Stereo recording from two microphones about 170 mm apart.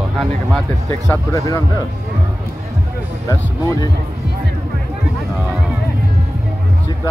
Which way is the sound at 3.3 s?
20° left (ahead or behind).